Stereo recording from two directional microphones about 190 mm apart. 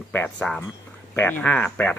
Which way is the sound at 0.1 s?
10° left (ahead or behind).